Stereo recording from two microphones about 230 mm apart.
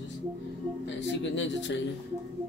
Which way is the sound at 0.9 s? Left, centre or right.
Left.